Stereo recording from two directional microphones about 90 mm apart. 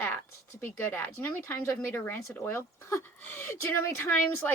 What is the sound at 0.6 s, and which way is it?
Speech, 25° left (ahead or behind).